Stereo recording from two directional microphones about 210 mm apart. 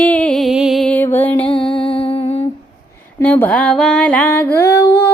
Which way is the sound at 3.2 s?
10° left (ahead or behind).